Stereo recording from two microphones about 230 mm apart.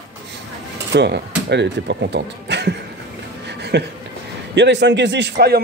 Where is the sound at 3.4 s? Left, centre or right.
Right.